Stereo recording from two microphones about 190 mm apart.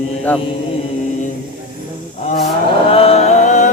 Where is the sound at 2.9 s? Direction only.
30° left (ahead or behind).